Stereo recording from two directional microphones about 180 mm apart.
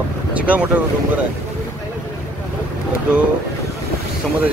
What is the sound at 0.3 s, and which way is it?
Boat, 5° right (ahead or behind).